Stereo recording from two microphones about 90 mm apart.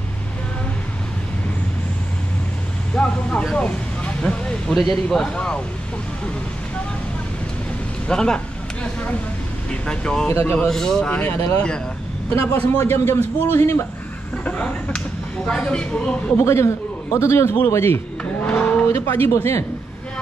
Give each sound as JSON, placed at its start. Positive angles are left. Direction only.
{"t": 3.0, "sound": "vehicle", "side_deg": 15}
{"t": 5.1, "sound": "speech", "side_deg": 10}
{"t": 8.1, "sound": "speech", "side_deg": 10}
{"t": 9.7, "sound": "speech", "side_deg": 10}
{"t": 10.2, "sound": "a man's voice", "side_deg": 25}
{"t": 10.7, "sound": "speech", "side_deg": 5}
{"t": 12.4, "sound": "a man's voice", "side_deg": 25}
{"t": 14.4, "sound": "speech", "side_deg": 15}
{"t": 16.3, "sound": "a man's voice", "side_deg": 30}
{"t": 18.5, "sound": "a sound", "side_deg": 15}
{"t": 18.9, "sound": "a man's voice", "side_deg": 30}